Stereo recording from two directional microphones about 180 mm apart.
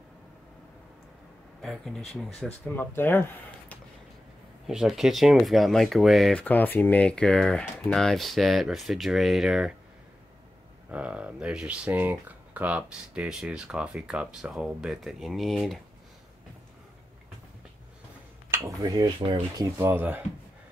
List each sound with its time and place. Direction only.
1.6 s speech: centre (ahead or behind)
4.6 s speech: centre (ahead or behind)
10.9 s speech: 5° right (ahead or behind)
18.8 s speech: 20° right (ahead or behind)
19.8 s speech: 10° right (ahead or behind)